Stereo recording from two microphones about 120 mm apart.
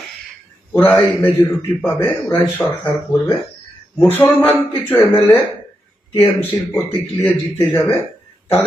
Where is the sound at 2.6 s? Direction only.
25° left (ahead or behind).